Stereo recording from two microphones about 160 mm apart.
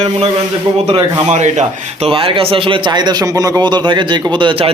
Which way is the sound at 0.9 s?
35° right (ahead or behind).